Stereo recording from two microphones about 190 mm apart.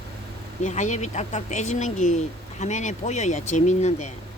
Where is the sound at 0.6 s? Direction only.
40° left (ahead or behind).